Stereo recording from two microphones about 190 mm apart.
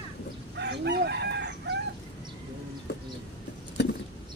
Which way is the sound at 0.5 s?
65° right (ahead or behind).